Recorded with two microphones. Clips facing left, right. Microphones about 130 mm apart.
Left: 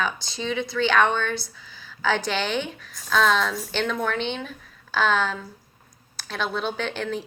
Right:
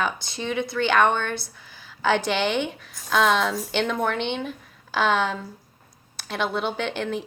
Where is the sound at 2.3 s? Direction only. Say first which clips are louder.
Right 3 dB; 20° right (ahead or behind).